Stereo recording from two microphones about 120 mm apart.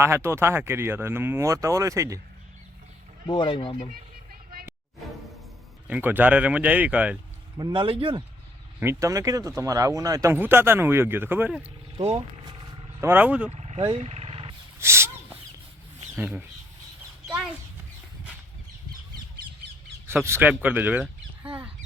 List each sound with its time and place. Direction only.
0.0 s speech: 20° right (ahead or behind)
3.2 s speech: 40° left (ahead or behind)
5.9 s speech: 15° right (ahead or behind)
7.5 s speech: 40° right (ahead or behind)
8.8 s speech: 25° right (ahead or behind)
12.1 s vehicle: 40° right (ahead or behind)
13.0 s speech: 20° right (ahead or behind)
13.5 s vehicle: 65° right (ahead or behind)
13.7 s speech: 40° right (ahead or behind)
14.0 s vehicle: 60° right (ahead or behind)
14.8 s a sound: 20° right (ahead or behind)
16.1 s speech: 15° right (ahead or behind)
17.2 s a sound: 5° right (ahead or behind)
20.1 s speech: 20° right (ahead or behind)